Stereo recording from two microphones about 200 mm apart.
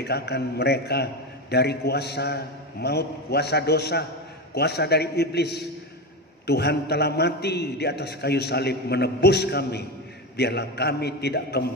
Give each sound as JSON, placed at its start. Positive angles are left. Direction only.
{"t": 0.0, "sound": "a man's voice", "side_deg": 55}